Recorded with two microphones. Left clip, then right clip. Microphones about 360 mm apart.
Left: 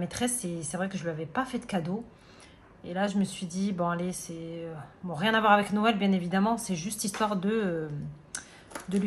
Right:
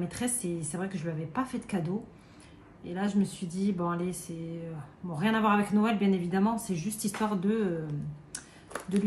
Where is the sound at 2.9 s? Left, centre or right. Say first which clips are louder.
Left 2 dB; left.